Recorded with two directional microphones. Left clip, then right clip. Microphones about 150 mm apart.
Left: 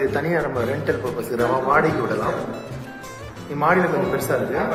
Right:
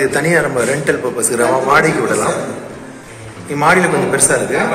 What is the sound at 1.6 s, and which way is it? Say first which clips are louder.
Speech: right 7 dB; 15° right (ahead or behind).